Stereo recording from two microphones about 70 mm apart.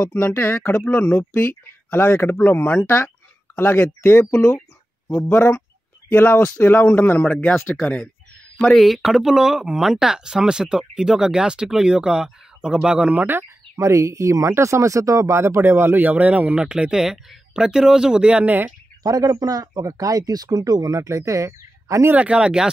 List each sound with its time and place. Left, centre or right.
0.4 s speech: left
0.8 s speech: left
4.4 s a sound: centre
5.3 s speech: left
8.5 s speech: centre; by 13.4 s right
13.4 s speech: right
19.0 s a man's voice: right
22.1 s speech: centre